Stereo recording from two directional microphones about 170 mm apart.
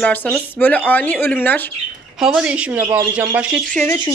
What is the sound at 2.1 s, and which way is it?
Speech, 5° right (ahead or behind).